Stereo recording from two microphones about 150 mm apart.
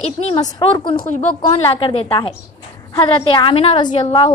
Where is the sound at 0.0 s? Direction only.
45° left (ahead or behind).